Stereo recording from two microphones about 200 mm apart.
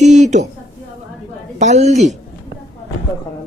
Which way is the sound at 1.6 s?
35° right (ahead or behind).